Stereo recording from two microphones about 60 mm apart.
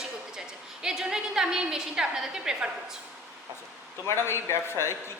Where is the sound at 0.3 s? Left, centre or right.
Centre.